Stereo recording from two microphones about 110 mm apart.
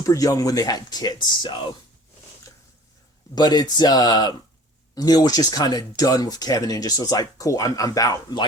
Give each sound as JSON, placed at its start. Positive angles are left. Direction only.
{"t": 0.0, "sound": "speech", "side_deg": 30}
{"t": 3.3, "sound": "speech", "side_deg": 40}